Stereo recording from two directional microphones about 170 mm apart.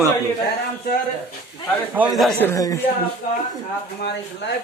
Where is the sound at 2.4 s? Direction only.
20° left (ahead or behind).